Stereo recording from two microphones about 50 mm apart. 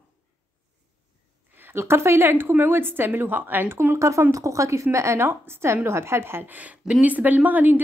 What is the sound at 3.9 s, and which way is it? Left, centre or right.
A woman's voice, right.